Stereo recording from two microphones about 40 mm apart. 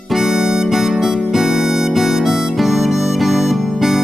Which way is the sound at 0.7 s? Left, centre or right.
Centre.